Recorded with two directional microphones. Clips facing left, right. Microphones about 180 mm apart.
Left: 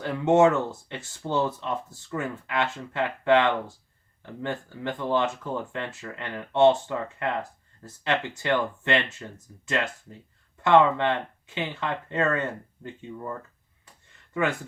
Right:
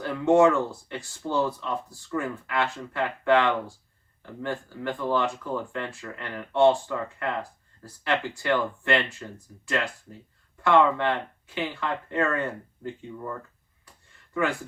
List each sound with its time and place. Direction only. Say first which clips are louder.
0.0 s speech: even; 20° left (ahead or behind)